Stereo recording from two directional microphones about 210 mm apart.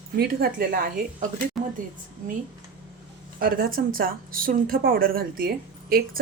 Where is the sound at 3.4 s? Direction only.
45° right (ahead or behind).